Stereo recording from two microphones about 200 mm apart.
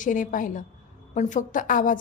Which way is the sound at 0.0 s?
40° left (ahead or behind).